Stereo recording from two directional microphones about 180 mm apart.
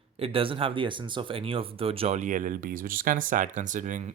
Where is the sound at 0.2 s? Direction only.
30° right (ahead or behind).